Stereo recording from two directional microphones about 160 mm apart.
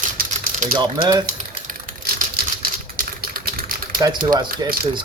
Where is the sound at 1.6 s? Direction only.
60° right (ahead or behind).